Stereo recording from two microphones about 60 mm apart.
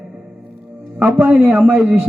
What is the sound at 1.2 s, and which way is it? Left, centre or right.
Speech, right.